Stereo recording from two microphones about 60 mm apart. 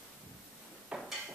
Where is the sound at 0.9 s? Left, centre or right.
Centre.